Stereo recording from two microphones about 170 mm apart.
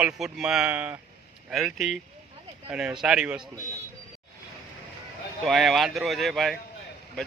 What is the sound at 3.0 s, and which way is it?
Speech, 5° right (ahead or behind).